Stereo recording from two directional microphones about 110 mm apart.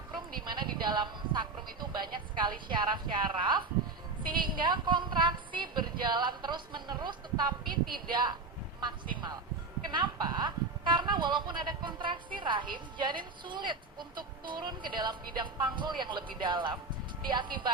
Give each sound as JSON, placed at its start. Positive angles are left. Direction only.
{"t": 0.4, "sound": "speech", "side_deg": -40}